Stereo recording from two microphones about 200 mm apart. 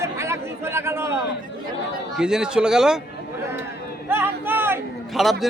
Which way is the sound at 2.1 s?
5° right (ahead or behind).